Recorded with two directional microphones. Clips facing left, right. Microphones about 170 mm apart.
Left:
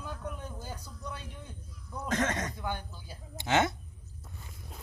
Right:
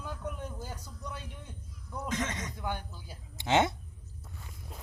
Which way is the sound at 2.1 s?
55° left (ahead or behind).